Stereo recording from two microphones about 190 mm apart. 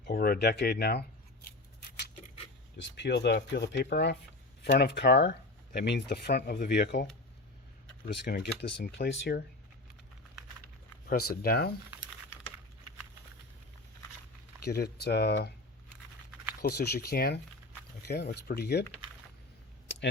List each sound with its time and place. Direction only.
0.1 s speech: 55° left (ahead or behind)
2.7 s speech: 65° left (ahead or behind)
8.1 s speech: 65° left (ahead or behind)
11.1 s speech: 55° left (ahead or behind)
14.8 s speech: 60° left (ahead or behind)
16.6 s speech: 55° left (ahead or behind)